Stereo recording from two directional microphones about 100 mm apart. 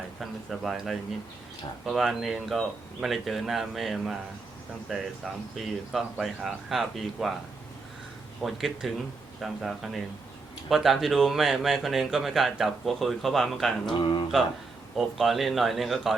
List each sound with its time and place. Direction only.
0.2 s speech: centre (ahead or behind)
8.4 s speech: centre (ahead or behind)
14.0 s a sound: 55° left (ahead or behind)
14.9 s speech: centre (ahead or behind)